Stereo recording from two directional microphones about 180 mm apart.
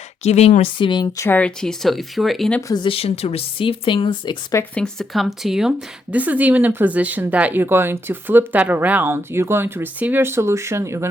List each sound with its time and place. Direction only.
0.2 s speech: 35° left (ahead or behind); by 2.6 s centre (ahead or behind)
2.6 s speech: 20° left (ahead or behind)
4.5 s speech: 5° left (ahead or behind); by 11.1 s 15° right (ahead or behind)